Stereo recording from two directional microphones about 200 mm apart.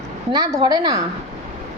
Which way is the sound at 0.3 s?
20° right (ahead or behind).